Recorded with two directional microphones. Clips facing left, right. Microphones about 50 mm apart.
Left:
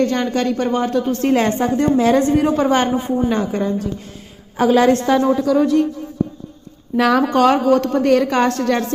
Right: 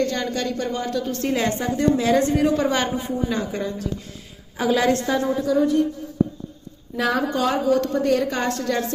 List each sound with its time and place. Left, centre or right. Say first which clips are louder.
0.0 s a woman's voice: left 6 dB; left
5.0 s a sound: left 6 dB; left
6.9 s a woman's voice: left 7 dB; left